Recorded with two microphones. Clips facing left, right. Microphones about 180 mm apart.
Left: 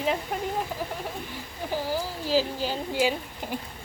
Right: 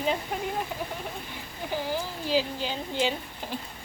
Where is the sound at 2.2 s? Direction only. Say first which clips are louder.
Left 2 dB; 40° left (ahead or behind).